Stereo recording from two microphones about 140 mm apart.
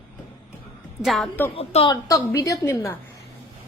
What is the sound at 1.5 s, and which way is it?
Speech, 40° left (ahead or behind).